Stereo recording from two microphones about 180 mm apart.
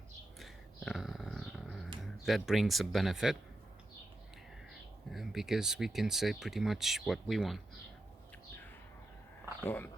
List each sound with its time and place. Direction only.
0.3 s a sound: centre (ahead or behind)
2.0 s speech: centre (ahead or behind)
5.1 s speech: centre (ahead or behind)
9.6 s speech: 10° left (ahead or behind)